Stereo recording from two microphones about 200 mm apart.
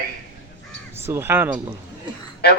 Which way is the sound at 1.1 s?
10° right (ahead or behind).